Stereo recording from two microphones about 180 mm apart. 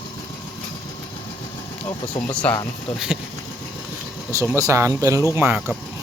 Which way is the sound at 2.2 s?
10° left (ahead or behind).